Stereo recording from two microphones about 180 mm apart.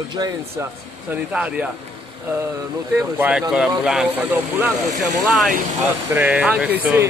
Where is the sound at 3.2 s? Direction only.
5° right (ahead or behind).